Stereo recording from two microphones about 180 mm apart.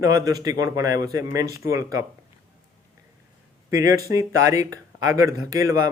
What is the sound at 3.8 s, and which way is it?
Speech, 20° right (ahead or behind).